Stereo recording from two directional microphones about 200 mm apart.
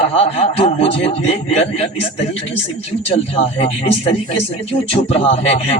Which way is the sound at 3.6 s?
30° left (ahead or behind).